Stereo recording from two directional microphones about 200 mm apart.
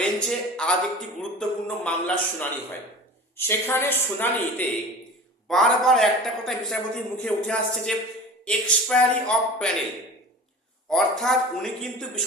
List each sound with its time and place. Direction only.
0.0 s a man's voice: 5° left (ahead or behind)
10.8 s a man's voice: centre (ahead or behind)